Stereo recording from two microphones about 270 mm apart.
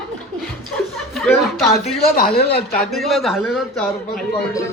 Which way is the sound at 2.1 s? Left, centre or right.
Left.